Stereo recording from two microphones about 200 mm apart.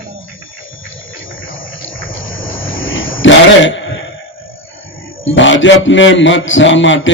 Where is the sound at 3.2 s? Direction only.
65° left (ahead or behind).